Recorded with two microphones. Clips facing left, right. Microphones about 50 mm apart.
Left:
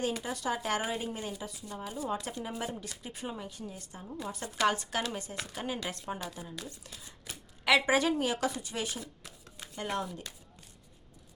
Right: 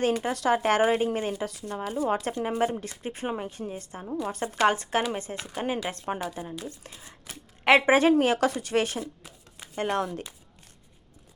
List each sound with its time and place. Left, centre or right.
0.0 s speech: right
2.0 s speech: right
4.2 s speech: right
8.1 s speech: right
10.0 s speech: right